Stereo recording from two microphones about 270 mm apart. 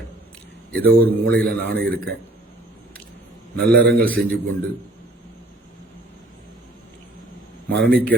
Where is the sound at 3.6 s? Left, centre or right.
Centre.